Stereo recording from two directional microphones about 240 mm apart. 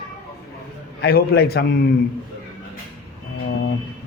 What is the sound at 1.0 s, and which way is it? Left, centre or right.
Speech, left.